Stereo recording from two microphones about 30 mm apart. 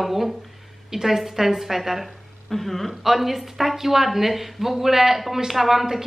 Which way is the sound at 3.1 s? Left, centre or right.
Centre.